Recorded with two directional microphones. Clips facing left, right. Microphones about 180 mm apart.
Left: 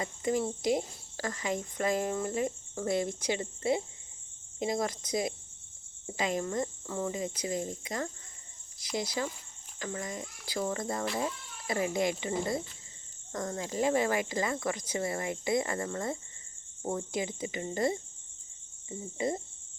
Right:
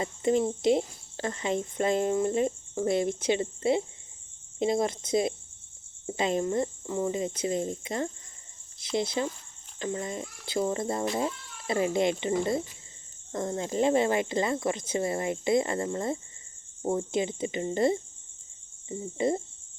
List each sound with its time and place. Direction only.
0.0 s speech: 25° right (ahead or behind)